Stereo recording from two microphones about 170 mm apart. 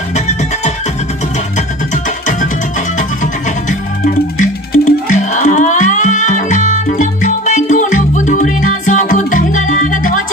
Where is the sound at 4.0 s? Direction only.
55° left (ahead or behind).